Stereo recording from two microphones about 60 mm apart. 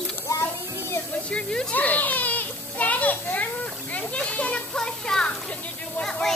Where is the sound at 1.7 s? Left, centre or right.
Left; by 6.3 s centre.